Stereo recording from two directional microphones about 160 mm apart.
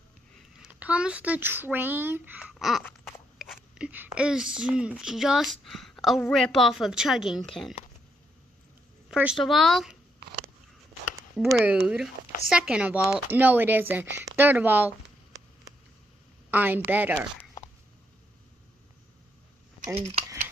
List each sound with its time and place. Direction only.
0.6 s speech: 10° right (ahead or behind)
9.1 s speech: 5° right (ahead or behind)
11.3 s a woman's voice: 5° right (ahead or behind)
16.4 s a woman's voice: 10° right (ahead or behind)
20.0 s speech: 40° right (ahead or behind)